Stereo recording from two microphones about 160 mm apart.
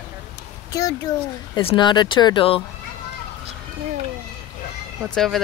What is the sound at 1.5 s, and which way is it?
Speech, 30° left (ahead or behind).